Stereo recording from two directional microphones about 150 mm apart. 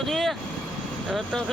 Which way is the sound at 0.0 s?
Centre (ahead or behind).